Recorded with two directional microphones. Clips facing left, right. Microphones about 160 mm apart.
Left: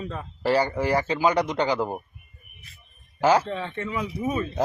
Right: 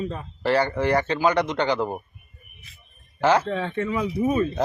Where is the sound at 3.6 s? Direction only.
30° right (ahead or behind).